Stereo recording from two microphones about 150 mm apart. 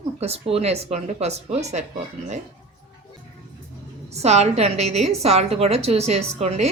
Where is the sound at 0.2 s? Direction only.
40° right (ahead or behind).